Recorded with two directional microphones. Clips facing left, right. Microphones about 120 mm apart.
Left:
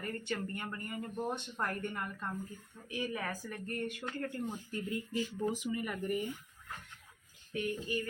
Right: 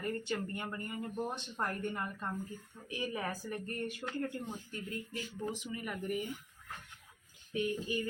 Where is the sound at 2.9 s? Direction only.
20° right (ahead or behind).